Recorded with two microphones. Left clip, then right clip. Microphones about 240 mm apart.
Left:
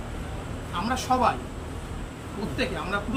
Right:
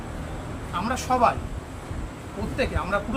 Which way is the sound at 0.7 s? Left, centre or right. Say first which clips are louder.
Right 1 dB; centre.